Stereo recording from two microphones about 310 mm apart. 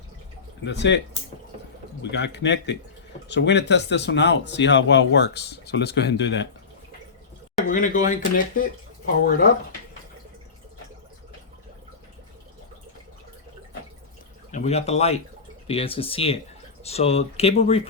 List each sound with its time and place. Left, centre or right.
0.6 s speech: left
7.7 s speech: left
14.5 s speech: left